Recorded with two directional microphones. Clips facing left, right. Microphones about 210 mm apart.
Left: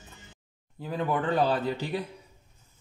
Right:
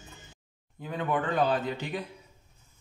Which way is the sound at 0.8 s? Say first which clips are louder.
Left 2 dB; 35° left (ahead or behind).